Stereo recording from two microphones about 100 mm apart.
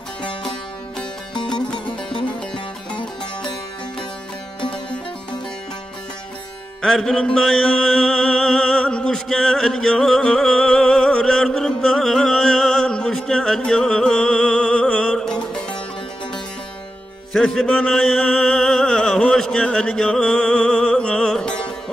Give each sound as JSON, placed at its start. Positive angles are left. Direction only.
{"t": 1.3, "sound": "music", "side_deg": 50}
{"t": 6.8, "sound": "music", "side_deg": 5}
{"t": 17.3, "sound": "music", "side_deg": 5}